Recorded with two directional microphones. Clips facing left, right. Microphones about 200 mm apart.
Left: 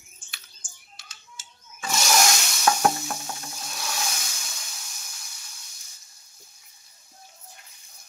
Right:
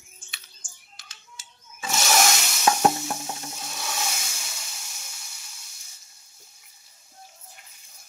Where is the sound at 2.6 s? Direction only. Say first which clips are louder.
Right 1 dB; 25° right (ahead or behind).